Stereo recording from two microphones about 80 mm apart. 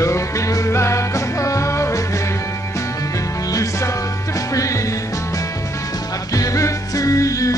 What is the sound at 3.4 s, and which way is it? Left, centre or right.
Music, left.